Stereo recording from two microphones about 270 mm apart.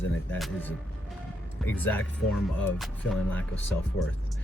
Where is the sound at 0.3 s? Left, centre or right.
Centre.